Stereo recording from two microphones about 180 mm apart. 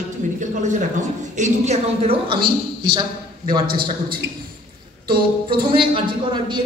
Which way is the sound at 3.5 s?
55° right (ahead or behind).